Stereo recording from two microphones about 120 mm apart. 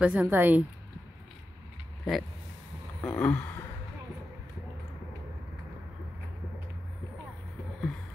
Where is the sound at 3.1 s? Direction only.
10° left (ahead or behind).